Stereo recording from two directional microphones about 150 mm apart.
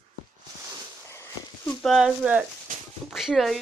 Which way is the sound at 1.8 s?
5° right (ahead or behind).